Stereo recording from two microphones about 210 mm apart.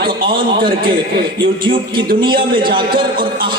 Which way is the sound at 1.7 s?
25° right (ahead or behind).